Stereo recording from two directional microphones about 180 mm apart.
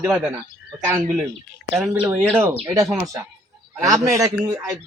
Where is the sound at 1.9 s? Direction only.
10° right (ahead or behind).